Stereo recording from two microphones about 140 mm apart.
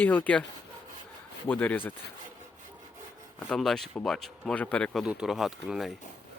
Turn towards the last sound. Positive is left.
turn(degrees=0)  # may be behind; listen again after turning